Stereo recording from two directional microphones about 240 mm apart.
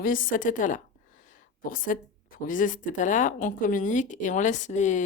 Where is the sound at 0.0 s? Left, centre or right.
Left.